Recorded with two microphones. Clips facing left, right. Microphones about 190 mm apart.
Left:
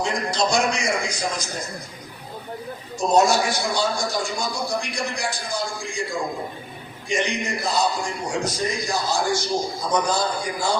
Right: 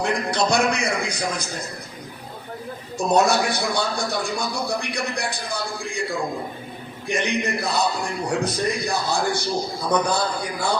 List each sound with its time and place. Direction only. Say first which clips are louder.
0.0 s a man's voice: right 1 dB; 60° right (ahead or behind)
3.1 s a man's voice: even; 60° right (ahead or behind)
7.1 s a man's voice: right 1 dB; 60° right (ahead or behind)